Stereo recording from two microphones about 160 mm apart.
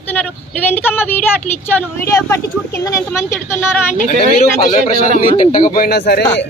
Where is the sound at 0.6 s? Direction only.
10° left (ahead or behind).